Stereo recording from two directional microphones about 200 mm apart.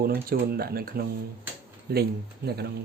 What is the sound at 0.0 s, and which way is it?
Speech, 50° right (ahead or behind).